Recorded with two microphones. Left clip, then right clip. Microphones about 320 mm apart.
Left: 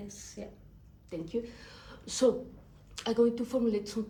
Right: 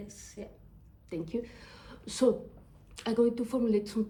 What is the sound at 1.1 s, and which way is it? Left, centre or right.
A woman's voice, right.